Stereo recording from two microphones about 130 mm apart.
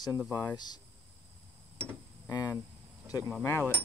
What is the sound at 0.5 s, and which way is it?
Speech, 30° left (ahead or behind).